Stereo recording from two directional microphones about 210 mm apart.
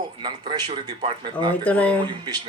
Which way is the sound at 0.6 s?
30° right (ahead or behind).